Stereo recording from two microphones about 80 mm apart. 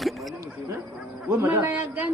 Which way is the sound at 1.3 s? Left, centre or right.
Right.